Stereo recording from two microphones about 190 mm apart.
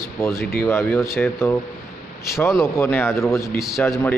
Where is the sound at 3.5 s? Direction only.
Centre (ahead or behind).